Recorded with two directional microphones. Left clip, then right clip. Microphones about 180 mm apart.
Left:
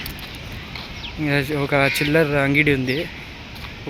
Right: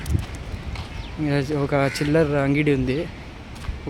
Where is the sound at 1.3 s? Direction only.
10° right (ahead or behind).